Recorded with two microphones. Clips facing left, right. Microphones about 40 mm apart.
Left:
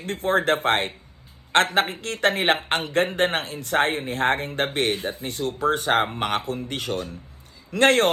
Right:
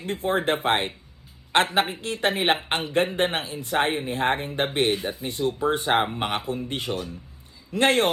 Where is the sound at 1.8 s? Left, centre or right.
Left.